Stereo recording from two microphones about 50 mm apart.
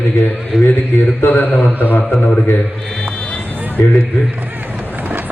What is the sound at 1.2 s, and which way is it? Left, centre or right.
Speech, left.